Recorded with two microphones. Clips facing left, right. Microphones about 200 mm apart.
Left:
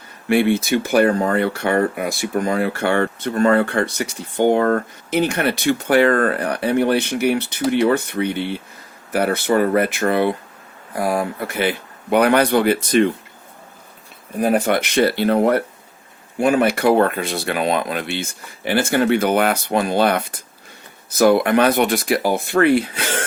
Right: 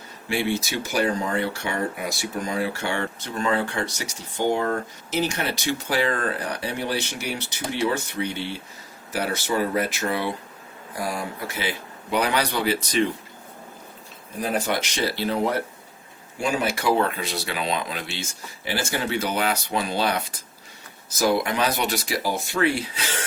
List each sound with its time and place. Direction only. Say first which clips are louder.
0.3 s speech: left 9 dB; 55° left (ahead or behind)
14.3 s speech: left 8 dB; 55° left (ahead or behind)